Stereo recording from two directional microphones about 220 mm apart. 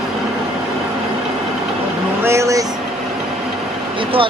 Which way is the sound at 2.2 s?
15° right (ahead or behind).